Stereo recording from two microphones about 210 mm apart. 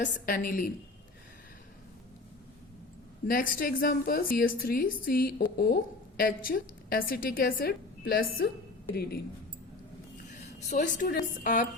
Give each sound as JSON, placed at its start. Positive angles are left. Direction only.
{"t": 0.0, "sound": "a woman's voice", "side_deg": 40}
{"t": 3.2, "sound": "a woman's voice", "side_deg": 40}
{"t": 10.7, "sound": "a woman's voice", "side_deg": 35}